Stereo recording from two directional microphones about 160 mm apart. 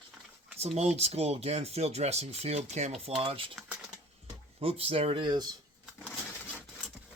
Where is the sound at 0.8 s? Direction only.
40° right (ahead or behind).